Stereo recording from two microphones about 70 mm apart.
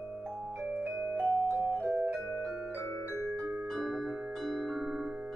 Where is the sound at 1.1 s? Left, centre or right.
Right.